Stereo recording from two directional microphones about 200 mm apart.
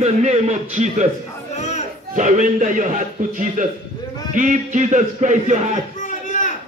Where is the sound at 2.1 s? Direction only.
40° right (ahead or behind).